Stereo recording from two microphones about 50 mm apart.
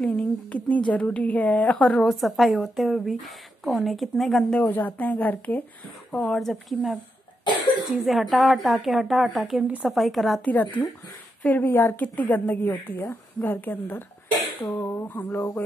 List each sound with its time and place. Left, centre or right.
0.1 s a woman's voice: left
2.0 s a woman's voice: centre
4.6 s speech: left
6.1 s speech: centre
7.9 s a woman's voice: centre
9.7 s a woman's voice: right
9.9 s a woman's voice: centre
10.4 s a woman's voice: left
14.8 s a sound: left
15.0 s speech: left